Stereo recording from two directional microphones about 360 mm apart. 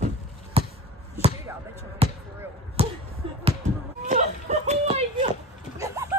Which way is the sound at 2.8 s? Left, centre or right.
Centre.